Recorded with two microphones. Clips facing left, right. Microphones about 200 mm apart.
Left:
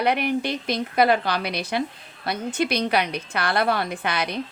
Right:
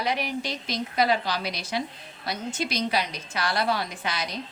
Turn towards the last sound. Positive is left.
turn(degrees=60)  # may be behind; listen again after turning